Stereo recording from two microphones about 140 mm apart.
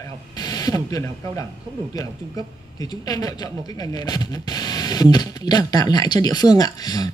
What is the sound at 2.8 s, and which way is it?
Speech, 25° left (ahead or behind).